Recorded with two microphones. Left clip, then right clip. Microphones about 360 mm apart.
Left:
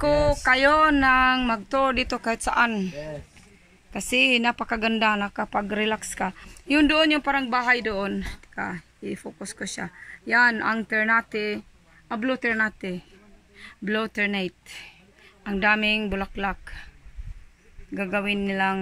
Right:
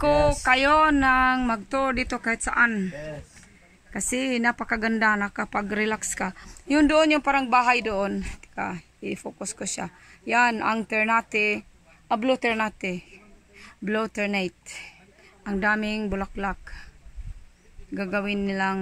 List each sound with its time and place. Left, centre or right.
0.0 s speech: centre
17.9 s speech: centre